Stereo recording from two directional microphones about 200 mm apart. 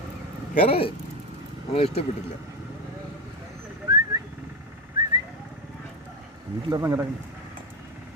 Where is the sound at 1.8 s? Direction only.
30° left (ahead or behind).